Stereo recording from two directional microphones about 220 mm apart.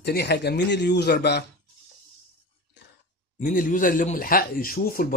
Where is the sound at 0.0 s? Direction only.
50° left (ahead or behind).